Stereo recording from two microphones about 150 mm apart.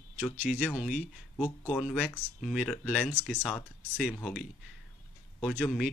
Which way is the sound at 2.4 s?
Centre (ahead or behind).